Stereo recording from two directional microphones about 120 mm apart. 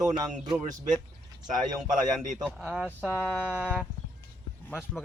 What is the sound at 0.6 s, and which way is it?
A man's voice, 90° right.